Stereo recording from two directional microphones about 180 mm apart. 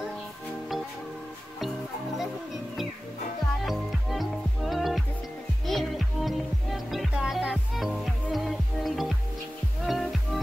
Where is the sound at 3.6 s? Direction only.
Centre (ahead or behind).